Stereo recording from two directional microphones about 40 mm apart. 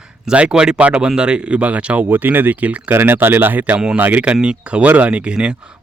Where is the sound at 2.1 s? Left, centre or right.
Right.